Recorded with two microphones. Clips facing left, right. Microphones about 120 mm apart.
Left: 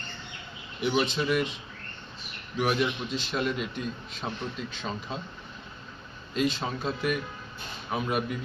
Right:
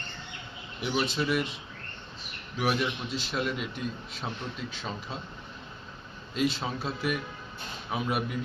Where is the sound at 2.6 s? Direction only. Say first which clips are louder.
Left 2 dB; 5° right (ahead or behind).